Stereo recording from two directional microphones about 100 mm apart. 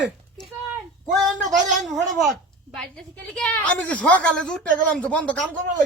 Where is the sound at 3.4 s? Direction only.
15° left (ahead or behind).